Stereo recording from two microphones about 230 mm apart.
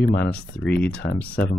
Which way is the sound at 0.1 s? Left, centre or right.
Left.